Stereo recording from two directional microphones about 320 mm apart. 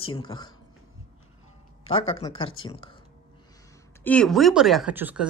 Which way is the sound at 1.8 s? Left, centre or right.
Centre.